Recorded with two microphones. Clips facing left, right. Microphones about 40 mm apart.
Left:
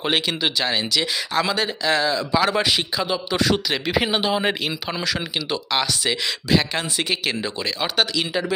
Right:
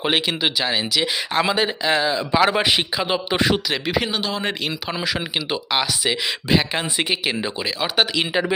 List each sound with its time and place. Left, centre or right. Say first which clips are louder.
0.0 s speech: right 1 dB; centre
1.3 s speech: right 3 dB; right
3.5 s speech: even; centre
4.0 s speech: left 3 dB; centre
4.6 s speech: even; centre
5.0 s speech: right 1 dB; centre
7.9 s speech: right 3 dB; right